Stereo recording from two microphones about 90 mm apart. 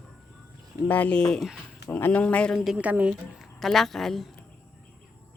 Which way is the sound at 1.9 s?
20° left (ahead or behind).